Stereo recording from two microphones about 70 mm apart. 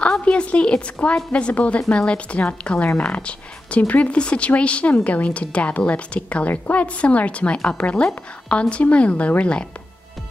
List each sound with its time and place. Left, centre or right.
0.2 s speech: centre